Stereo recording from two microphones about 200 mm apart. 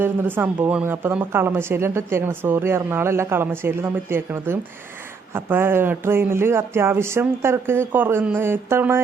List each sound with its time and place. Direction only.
0.0 s speech: 10° right (ahead or behind)